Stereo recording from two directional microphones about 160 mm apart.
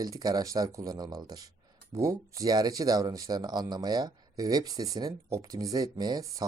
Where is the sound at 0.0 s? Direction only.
25° right (ahead or behind).